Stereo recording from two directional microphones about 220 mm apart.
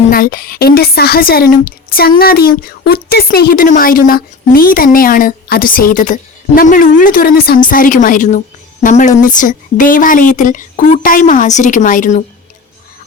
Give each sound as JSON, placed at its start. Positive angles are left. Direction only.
{"t": 0.1, "sound": "a woman's voice", "side_deg": 40}